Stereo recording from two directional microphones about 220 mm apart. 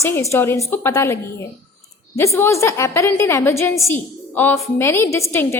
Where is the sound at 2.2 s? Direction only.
15° left (ahead or behind).